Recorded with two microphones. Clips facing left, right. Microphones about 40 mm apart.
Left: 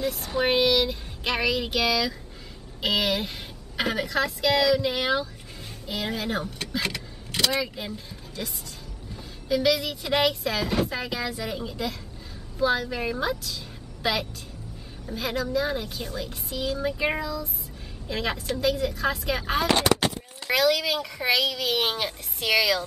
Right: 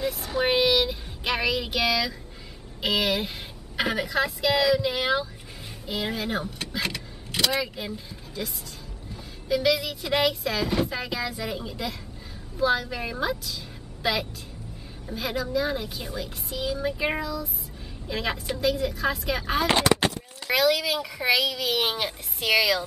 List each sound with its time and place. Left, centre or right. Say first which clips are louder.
0.0 s speech: even; centre